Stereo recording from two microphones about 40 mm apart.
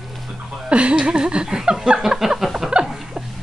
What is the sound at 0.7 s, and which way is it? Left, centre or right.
Speech, right.